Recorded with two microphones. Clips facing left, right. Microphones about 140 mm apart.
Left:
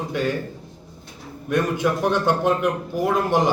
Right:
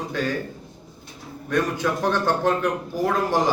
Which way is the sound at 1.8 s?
15° left (ahead or behind).